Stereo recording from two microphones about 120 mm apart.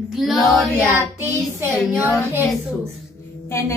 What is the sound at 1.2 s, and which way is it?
Child singing, 15° right (ahead or behind).